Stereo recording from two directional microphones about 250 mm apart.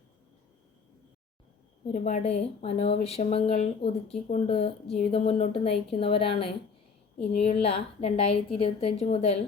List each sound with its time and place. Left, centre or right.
1.9 s a woman's voice: left